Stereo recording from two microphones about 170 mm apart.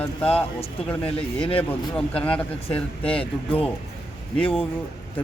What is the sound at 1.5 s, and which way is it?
A man's voice, 10° left (ahead or behind).